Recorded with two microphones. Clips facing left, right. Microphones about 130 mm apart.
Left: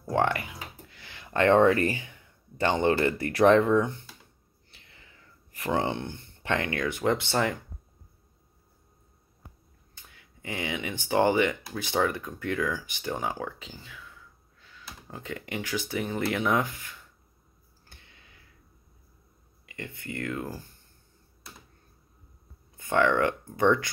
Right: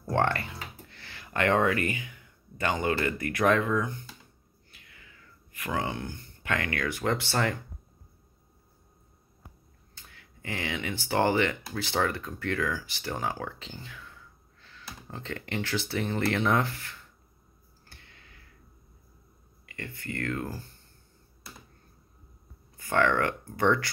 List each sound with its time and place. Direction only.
0.0 s speech: 10° left (ahead or behind); by 3.9 s 30° left (ahead or behind)
4.6 s a sound: 30° left (ahead or behind)
9.9 s speech: 15° left (ahead or behind)
17.8 s a sound: 20° left (ahead or behind)
19.6 s speech: 20° left (ahead or behind)
22.8 s speech: 20° left (ahead or behind)